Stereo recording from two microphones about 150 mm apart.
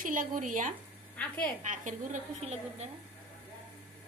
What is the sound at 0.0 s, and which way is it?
Speech, 65° right (ahead or behind).